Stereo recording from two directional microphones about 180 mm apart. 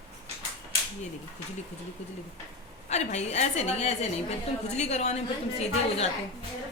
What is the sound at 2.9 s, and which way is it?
A woman's voice, 40° left (ahead or behind).